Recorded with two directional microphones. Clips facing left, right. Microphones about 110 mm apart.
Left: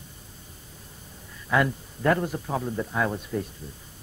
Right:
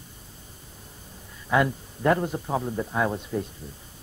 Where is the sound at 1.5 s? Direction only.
20° right (ahead or behind).